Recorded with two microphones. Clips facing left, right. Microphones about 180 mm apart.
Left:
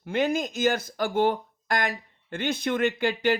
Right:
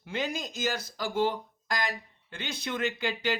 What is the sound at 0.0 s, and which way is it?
Speech, 55° left (ahead or behind).